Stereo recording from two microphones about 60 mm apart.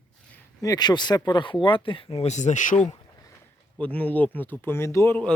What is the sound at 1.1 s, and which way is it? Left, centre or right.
Speech, left.